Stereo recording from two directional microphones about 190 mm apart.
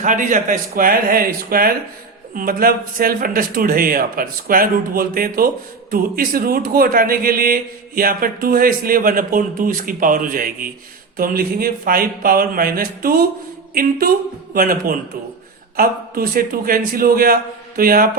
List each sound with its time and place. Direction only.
0.0 s a man's voice: 40° right (ahead or behind)
14.5 s a man's voice: 50° right (ahead or behind)